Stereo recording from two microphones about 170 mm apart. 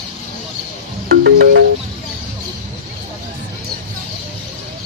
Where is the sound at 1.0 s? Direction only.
75° right (ahead or behind).